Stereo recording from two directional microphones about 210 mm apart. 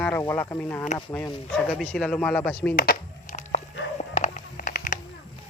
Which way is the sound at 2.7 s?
45° left (ahead or behind).